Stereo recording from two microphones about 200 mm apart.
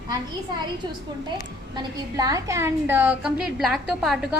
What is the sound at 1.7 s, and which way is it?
A woman's voice, 15° right (ahead or behind).